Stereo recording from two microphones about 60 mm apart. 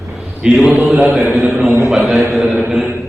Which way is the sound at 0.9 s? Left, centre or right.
Right.